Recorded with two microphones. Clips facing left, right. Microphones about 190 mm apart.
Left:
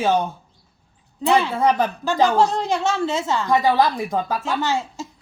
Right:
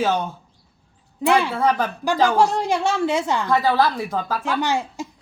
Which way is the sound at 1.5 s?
15° left (ahead or behind).